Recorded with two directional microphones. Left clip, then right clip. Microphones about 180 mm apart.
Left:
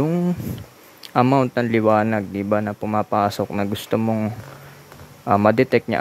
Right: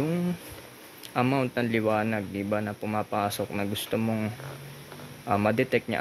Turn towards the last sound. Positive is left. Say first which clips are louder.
# left 8 dB
turn(degrees=30)  # may be behind; listen again after turning